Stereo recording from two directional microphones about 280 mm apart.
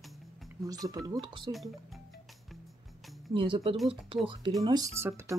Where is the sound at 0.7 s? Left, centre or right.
Centre.